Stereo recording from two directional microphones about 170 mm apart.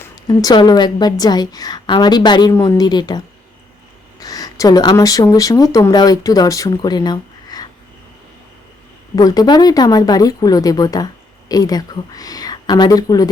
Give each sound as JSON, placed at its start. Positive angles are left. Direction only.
{"t": 0.0, "sound": "speech", "side_deg": 20}
{"t": 9.1, "sound": "speech", "side_deg": 20}